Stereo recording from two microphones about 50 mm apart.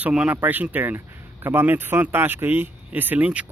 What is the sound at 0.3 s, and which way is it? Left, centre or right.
Speech, right.